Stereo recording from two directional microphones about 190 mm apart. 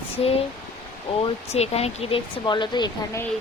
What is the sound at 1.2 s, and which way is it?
Speech, 35° left (ahead or behind).